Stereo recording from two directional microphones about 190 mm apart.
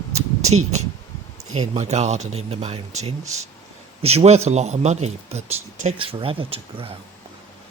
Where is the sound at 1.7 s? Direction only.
35° right (ahead or behind).